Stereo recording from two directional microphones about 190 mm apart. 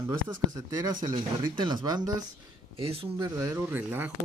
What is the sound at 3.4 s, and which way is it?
Speech, 15° right (ahead or behind).